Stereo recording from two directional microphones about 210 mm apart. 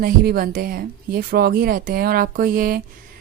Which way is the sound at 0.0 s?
45° right (ahead or behind).